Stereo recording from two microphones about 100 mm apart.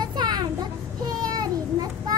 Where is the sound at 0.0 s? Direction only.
45° right (ahead or behind).